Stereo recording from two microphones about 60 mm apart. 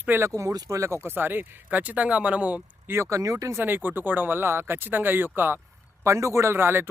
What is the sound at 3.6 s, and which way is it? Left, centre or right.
Speech, right.